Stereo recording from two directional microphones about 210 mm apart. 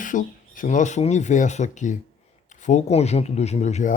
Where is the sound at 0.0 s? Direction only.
40° left (ahead or behind).